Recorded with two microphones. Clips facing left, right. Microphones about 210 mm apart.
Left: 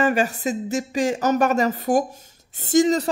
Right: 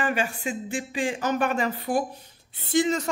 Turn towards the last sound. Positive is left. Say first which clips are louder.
# left 6 dB
turn(degrees=40)  # may be behind; listen again after turning